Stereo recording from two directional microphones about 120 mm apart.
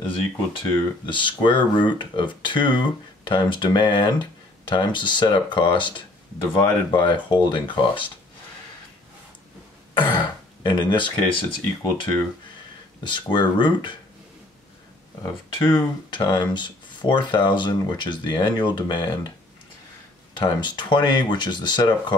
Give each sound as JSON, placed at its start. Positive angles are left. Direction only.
{"t": 0.0, "sound": "speech", "side_deg": 45}
{"t": 9.9, "sound": "speech", "side_deg": 40}
{"t": 15.5, "sound": "speech", "side_deg": 45}
{"t": 20.3, "sound": "speech", "side_deg": 40}